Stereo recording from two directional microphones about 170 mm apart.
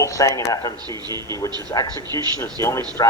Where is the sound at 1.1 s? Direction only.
25° right (ahead or behind).